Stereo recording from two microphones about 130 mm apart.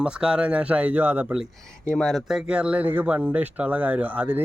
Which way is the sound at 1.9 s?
5° left (ahead or behind).